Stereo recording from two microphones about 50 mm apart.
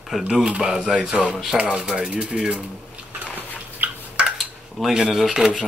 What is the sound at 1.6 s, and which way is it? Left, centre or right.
Speech, right.